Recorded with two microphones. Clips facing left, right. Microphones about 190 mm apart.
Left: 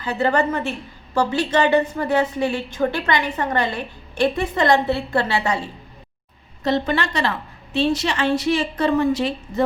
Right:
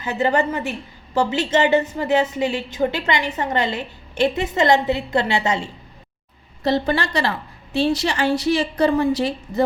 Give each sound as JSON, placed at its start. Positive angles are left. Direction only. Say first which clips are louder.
{"t": 0.0, "sound": "a woman's voice", "louder": "even", "side_deg": -20}
{"t": 6.7, "sound": "a woman's voice", "louder": "right 1 dB", "side_deg": -35}